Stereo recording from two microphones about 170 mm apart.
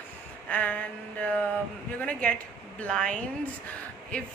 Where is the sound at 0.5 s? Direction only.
10° left (ahead or behind).